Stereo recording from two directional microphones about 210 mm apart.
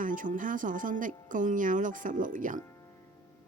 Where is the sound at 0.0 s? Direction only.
40° right (ahead or behind).